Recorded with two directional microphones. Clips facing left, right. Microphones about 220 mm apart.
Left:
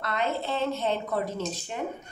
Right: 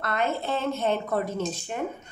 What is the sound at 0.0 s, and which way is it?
A woman's voice, 50° right (ahead or behind).